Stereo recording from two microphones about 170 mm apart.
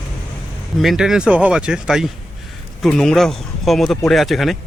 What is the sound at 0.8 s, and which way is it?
Speech, centre (ahead or behind).